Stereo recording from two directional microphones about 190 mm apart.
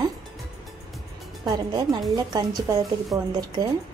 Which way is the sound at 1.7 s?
20° right (ahead or behind).